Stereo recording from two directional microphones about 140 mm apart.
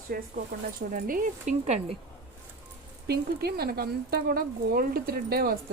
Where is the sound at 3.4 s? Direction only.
90° right.